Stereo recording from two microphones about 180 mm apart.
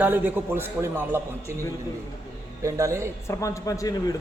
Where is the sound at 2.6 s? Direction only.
20° right (ahead or behind).